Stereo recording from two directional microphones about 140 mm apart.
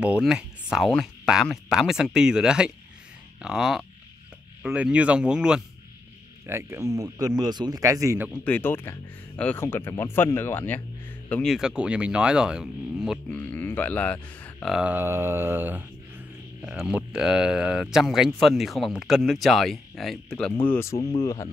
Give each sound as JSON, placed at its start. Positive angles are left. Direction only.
{"t": 0.0, "sound": "speech", "side_deg": -5}
{"t": 6.4, "sound": "speech", "side_deg": -20}
{"t": 8.3, "sound": "speech", "side_deg": 10}
{"t": 11.4, "sound": "speech", "side_deg": -5}
{"t": 13.3, "sound": "speech", "side_deg": 15}
{"t": 14.7, "sound": "speech", "side_deg": -10}
{"t": 20.6, "sound": "speech", "side_deg": 15}